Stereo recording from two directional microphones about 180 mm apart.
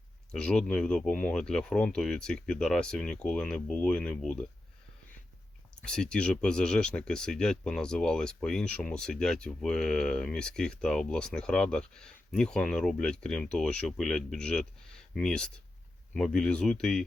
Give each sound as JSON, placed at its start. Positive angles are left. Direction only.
{"t": 0.3, "sound": "speech", "side_deg": 5}
{"t": 5.7, "sound": "speech", "side_deg": 5}